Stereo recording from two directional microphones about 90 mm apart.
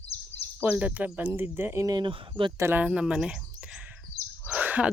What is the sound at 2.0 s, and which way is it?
Speech, 65° right (ahead or behind).